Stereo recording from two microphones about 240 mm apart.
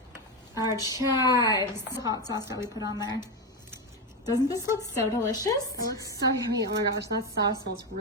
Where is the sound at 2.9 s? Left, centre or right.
Centre.